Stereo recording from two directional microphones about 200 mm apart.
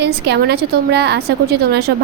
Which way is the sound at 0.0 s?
55° right (ahead or behind).